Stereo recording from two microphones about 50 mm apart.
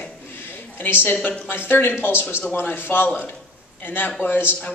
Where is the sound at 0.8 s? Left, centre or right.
Left.